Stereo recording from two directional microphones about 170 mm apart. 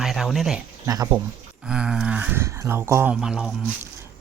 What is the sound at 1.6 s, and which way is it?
Speech, 5° right (ahead or behind).